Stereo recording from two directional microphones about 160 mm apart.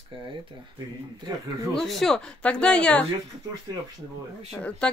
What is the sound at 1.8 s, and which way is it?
Speech, centre (ahead or behind).